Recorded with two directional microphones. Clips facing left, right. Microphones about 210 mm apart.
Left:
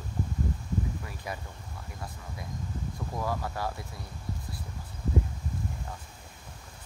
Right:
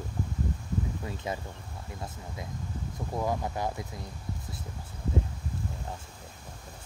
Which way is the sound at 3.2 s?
20° right (ahead or behind).